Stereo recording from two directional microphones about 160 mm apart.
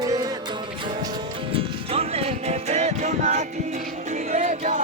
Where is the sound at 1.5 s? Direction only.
40° right (ahead or behind).